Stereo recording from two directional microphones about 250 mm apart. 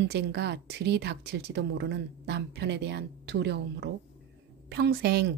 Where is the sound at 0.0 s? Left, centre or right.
Right.